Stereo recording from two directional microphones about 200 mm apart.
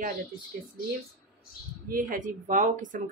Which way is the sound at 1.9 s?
45° right (ahead or behind).